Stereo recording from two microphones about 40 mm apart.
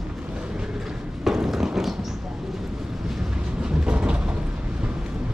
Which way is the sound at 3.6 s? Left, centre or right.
Right.